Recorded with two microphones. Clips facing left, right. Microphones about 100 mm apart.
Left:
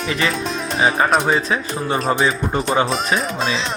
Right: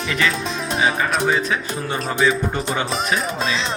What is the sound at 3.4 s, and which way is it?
Speech, centre (ahead or behind).